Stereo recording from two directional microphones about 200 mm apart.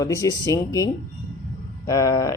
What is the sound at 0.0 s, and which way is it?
Speech, 15° left (ahead or behind).